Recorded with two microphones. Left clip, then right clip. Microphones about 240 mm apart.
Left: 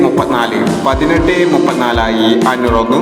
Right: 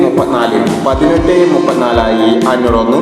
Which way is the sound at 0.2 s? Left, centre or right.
Left.